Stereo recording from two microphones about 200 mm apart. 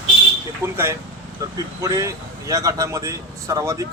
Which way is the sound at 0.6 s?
10° right (ahead or behind).